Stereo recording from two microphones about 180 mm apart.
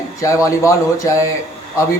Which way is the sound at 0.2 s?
15° left (ahead or behind).